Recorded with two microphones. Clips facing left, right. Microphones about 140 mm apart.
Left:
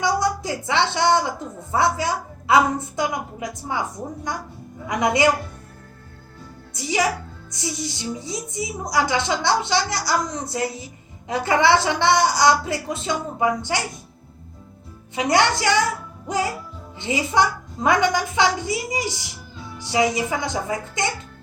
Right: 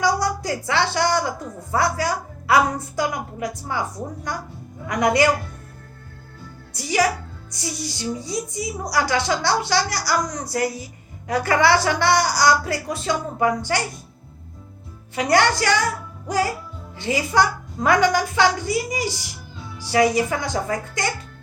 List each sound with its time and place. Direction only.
0.0 s a woman's voice: 20° left (ahead or behind)
6.7 s a woman's voice: 20° left (ahead or behind)
15.1 s a woman's voice: 20° left (ahead or behind)
17.0 s a woman's voice: 20° left (ahead or behind)